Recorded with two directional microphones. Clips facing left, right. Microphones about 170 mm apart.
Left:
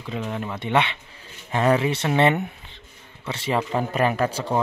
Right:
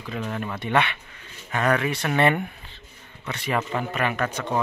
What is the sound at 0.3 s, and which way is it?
A man's voice, 20° left (ahead or behind).